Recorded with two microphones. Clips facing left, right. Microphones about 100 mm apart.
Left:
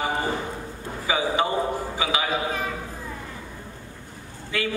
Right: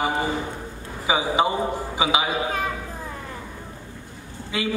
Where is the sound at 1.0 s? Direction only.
15° right (ahead or behind).